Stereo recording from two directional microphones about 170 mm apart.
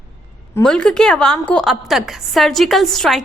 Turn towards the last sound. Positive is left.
turn(degrees=0)  # may be behind; listen again after turning